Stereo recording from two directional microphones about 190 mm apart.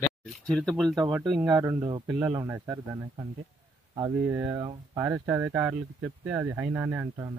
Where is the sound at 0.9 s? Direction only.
20° right (ahead or behind).